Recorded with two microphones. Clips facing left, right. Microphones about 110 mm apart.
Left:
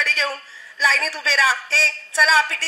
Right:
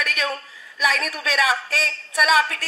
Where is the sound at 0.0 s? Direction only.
30° left (ahead or behind).